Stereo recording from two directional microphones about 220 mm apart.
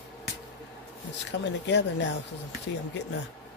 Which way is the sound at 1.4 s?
55° left (ahead or behind).